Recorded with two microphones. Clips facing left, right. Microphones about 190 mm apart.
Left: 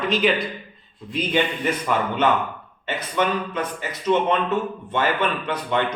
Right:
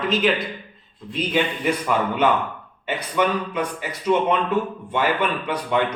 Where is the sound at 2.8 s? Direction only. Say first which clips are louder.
Right 1 dB; 10° right (ahead or behind).